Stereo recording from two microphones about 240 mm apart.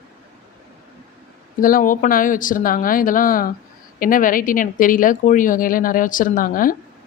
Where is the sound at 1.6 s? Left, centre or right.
Left.